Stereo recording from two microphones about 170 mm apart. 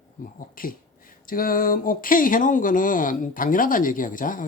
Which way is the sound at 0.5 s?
55° left (ahead or behind).